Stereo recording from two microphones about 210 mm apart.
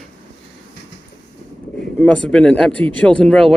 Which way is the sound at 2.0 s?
5° left (ahead or behind).